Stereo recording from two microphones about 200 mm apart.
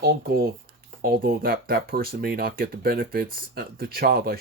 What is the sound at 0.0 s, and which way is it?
Speech, 50° right (ahead or behind).